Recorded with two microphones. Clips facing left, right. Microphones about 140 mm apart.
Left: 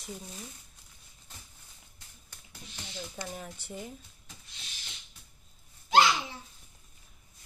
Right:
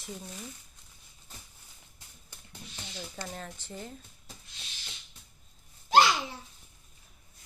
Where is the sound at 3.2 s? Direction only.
10° left (ahead or behind).